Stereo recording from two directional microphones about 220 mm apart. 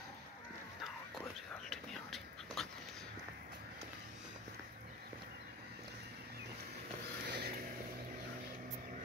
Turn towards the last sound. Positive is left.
turn(degrees=-45)  # may be behind; listen again after turning